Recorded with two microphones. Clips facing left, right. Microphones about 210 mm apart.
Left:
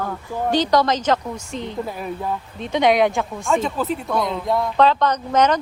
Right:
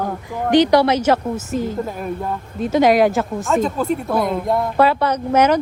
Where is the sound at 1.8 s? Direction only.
50° right (ahead or behind).